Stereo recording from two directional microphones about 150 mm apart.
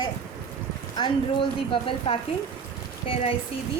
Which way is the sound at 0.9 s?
30° left (ahead or behind).